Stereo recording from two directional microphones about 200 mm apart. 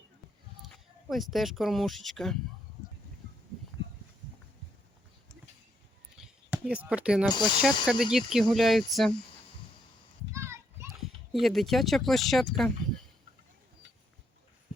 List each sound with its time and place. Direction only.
0.6 s speech: centre (ahead or behind)
6.1 s a sound: 5° right (ahead or behind)
7.3 s speech: 20° left (ahead or behind)
7.6 s speech: centre (ahead or behind)
10.3 s children playing: 15° right (ahead or behind)
11.0 s speech: centre (ahead or behind)